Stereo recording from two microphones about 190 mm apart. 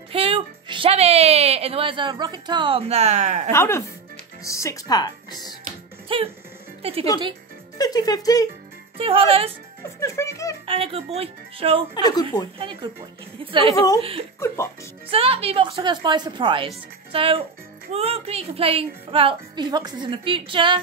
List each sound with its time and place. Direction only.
0.1 s speech: 30° right (ahead or behind)
3.5 s speech: 15° left (ahead or behind)
6.0 s music: 30° right (ahead or behind)
6.8 s speech: 30° right (ahead or behind)
7.7 s speech: 20° left (ahead or behind)
8.9 s a woman's voice: 30° right (ahead or behind)
9.9 s speech: 15° left (ahead or behind)
10.6 s a woman's voice: 30° right (ahead or behind)
11.9 s speech: 20° left (ahead or behind)
12.5 s a woman's voice: 25° right (ahead or behind)
13.7 s speech: 20° left (ahead or behind)
15.0 s a woman's voice: 30° right (ahead or behind)